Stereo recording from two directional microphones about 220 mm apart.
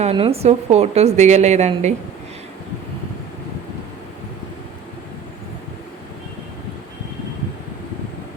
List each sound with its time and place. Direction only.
0.0 s a woman's voice: 25° right (ahead or behind)